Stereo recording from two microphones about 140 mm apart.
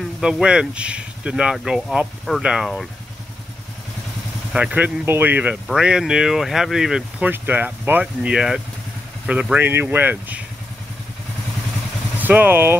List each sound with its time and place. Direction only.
0.2 s speech: 5° right (ahead or behind)
4.5 s speech: 10° right (ahead or behind)
12.2 s speech: 15° right (ahead or behind)